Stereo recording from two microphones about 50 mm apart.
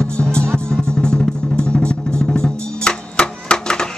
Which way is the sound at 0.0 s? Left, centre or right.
Centre.